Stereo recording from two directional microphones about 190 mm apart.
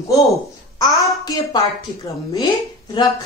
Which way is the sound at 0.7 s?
15° left (ahead or behind).